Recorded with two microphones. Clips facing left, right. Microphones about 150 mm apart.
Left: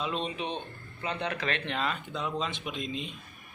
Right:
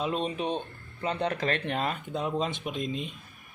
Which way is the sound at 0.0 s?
45° right (ahead or behind).